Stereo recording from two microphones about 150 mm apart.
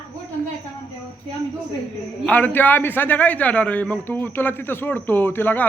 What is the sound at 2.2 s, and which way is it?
A man's voice, 10° left (ahead or behind).